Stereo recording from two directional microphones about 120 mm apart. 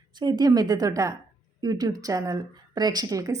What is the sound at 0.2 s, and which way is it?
A woman's voice, 35° right (ahead or behind).